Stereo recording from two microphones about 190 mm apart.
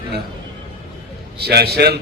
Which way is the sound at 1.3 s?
55° right (ahead or behind).